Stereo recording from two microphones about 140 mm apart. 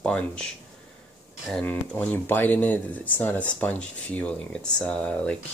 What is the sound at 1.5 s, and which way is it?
Speech, 5° left (ahead or behind).